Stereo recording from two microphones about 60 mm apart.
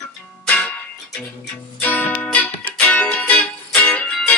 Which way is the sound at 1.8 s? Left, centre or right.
Left.